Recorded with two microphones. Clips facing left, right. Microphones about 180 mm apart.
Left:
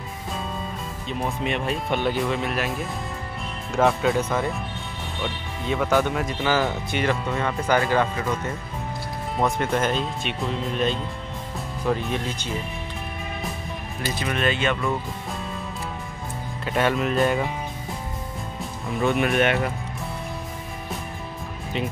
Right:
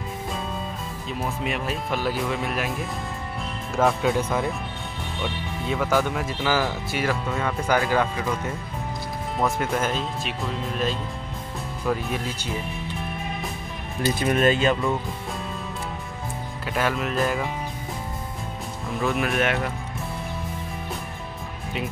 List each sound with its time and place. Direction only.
1.2 s speech: centre (ahead or behind)
9.4 s speech: 5° right (ahead or behind)
14.2 s speech: 40° right (ahead or behind)
16.6 s speech: centre (ahead or behind)
18.9 s speech: centre (ahead or behind)